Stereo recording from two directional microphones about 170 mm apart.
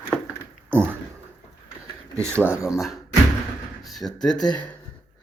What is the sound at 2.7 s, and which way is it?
Speech, centre (ahead or behind).